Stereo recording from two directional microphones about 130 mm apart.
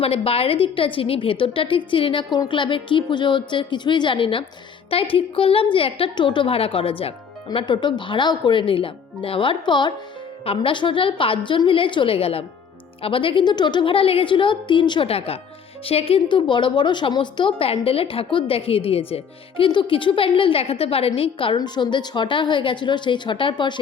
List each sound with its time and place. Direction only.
0.0 s a woman's voice: 45° left (ahead or behind)